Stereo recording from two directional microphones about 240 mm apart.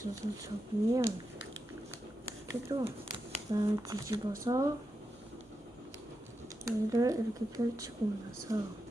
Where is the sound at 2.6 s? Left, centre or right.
Centre.